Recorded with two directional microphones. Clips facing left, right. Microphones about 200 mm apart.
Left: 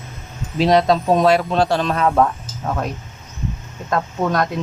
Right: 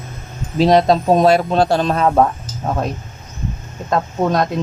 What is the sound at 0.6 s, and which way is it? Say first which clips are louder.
Speech: right 2 dB; 40° right (ahead or behind).